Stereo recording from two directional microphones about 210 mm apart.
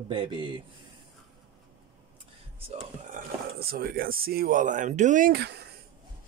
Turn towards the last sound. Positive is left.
turn(degrees=-50)  # may be behind; listen again after turning